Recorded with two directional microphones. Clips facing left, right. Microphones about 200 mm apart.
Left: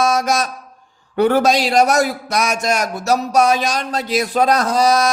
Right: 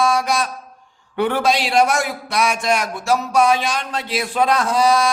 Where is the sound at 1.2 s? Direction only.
40° left (ahead or behind).